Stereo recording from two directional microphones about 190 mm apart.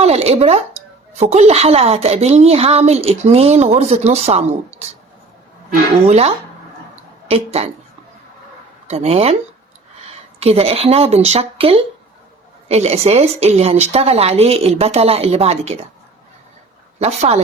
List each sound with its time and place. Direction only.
0.0 s a sound: 35° right (ahead or behind)
1.1 s a woman's voice: 35° right (ahead or behind)
6.1 s a woman's voice: 35° right (ahead or behind)
8.9 s a woman's voice: 35° right (ahead or behind)
10.4 s a woman's voice: 30° right (ahead or behind)
17.0 s a woman's voice: 35° right (ahead or behind)